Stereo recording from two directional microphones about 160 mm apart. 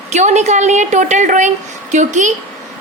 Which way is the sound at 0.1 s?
45° right (ahead or behind).